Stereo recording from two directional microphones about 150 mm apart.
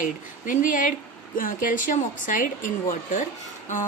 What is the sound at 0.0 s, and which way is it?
Speech, 60° left (ahead or behind).